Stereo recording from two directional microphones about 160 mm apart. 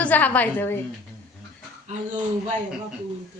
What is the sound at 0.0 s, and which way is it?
Speech, 10° left (ahead or behind).